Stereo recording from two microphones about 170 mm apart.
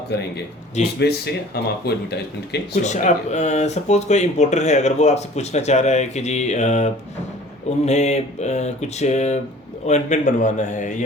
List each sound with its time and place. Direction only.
0.1 s speech: 85° left
2.8 s a man's voice: 45° left (ahead or behind)